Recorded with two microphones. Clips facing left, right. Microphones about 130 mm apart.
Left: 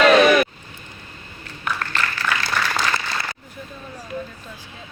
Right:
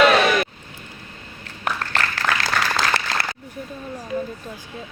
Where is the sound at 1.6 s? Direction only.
90° right.